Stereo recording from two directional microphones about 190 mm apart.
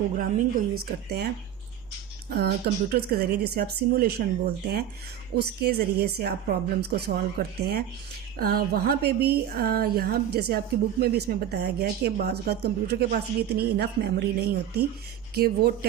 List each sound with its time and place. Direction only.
0.2 s a woman's voice: 45° right (ahead or behind)
2.9 s a woman's voice: 55° right (ahead or behind)